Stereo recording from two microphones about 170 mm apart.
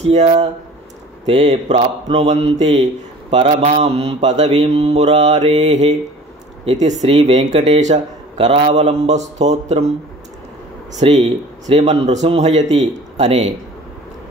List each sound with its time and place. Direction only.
0.1 s a man's voice: 40° right (ahead or behind)
4.5 s a man's voice: 30° right (ahead or behind)
10.9 s a man's voice: 40° right (ahead or behind)